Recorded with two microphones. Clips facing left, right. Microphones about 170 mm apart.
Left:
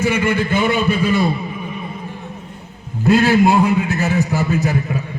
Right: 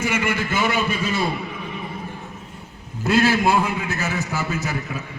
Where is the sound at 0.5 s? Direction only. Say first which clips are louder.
Left 5 dB; 55° left (ahead or behind).